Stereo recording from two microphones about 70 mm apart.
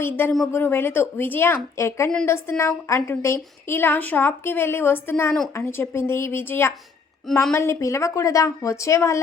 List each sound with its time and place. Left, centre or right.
0.0 s a woman's voice: left